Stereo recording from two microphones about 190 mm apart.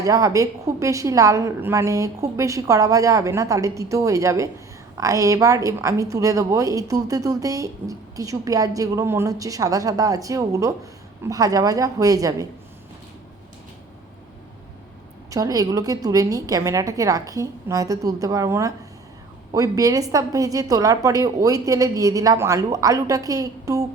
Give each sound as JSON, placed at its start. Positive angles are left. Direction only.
{"t": 0.0, "sound": "a woman's voice", "side_deg": -15}
{"t": 15.3, "sound": "a woman's voice", "side_deg": -20}